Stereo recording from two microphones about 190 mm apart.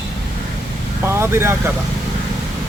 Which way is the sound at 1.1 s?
15° right (ahead or behind).